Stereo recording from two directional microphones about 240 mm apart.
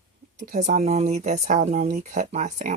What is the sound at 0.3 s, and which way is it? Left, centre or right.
Speech, right.